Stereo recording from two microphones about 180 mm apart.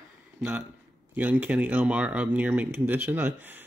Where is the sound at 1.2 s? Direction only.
10° right (ahead or behind).